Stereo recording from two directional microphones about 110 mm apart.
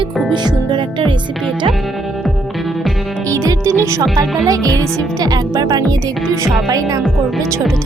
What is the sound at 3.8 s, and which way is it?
Speech, 30° right (ahead or behind).